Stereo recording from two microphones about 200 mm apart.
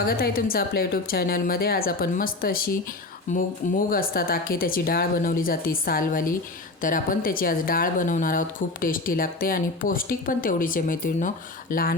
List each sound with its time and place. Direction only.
0.0 s speech: 45° left (ahead or behind)